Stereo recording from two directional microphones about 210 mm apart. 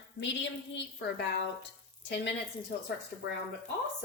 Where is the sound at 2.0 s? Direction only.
55° left (ahead or behind).